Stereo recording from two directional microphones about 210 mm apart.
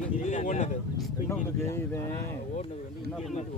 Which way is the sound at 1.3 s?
10° left (ahead or behind).